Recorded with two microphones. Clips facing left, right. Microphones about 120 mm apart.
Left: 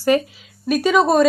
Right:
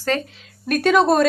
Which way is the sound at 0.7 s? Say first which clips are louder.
Even; centre (ahead or behind).